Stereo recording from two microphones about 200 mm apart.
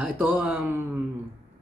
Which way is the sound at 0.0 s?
10° right (ahead or behind).